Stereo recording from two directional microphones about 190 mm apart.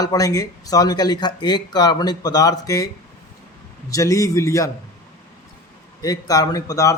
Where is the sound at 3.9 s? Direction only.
15° left (ahead or behind).